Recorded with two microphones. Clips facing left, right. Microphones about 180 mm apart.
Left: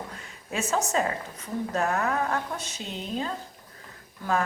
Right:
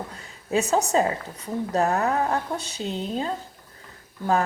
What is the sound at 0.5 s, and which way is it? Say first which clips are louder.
A woman's voice: right 5 dB; 35° right (ahead or behind).